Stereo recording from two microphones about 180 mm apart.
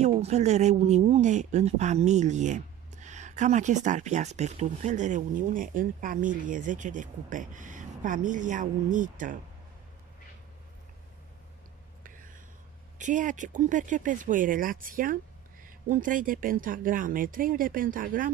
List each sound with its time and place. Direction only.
0.2 s speech: 40° right (ahead or behind)
13.0 s speech: 45° right (ahead or behind)